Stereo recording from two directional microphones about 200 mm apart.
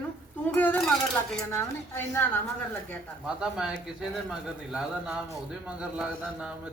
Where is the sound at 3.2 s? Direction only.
5° right (ahead or behind).